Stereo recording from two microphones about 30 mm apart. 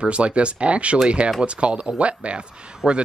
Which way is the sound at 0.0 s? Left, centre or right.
Right.